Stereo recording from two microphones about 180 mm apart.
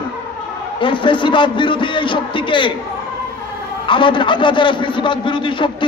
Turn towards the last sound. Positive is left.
turn(degrees=25)  # may be behind; listen again after turning